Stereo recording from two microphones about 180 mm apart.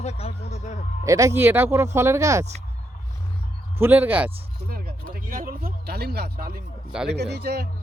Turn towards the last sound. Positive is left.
turn(degrees=-65)  # may be behind; listen again after turning